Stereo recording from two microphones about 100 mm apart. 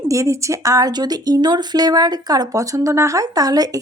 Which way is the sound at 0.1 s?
30° right (ahead or behind).